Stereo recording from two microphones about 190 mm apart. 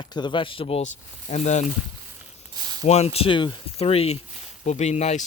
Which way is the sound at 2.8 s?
35° left (ahead or behind).